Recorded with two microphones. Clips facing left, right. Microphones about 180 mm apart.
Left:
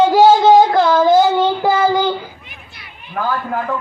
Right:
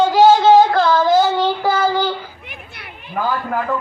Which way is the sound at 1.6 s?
15° left (ahead or behind).